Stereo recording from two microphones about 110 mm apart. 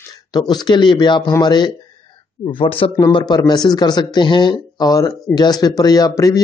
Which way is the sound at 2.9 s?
40° left (ahead or behind).